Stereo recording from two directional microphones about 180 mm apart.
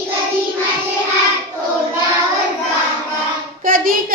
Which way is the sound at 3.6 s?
50° right (ahead or behind).